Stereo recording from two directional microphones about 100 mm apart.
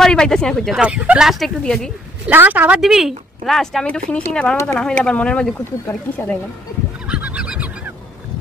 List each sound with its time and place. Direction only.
0.0 s speech: 5° left (ahead or behind)
0.7 s speech: 10° right (ahead or behind); by 1.9 s 5° left (ahead or behind)
2.2 s a woman's voice: 15° right (ahead or behind)
2.8 s speech: 5° right (ahead or behind); by 6.3 s 20° left (ahead or behind)
7.1 s neigh: 15° right (ahead or behind)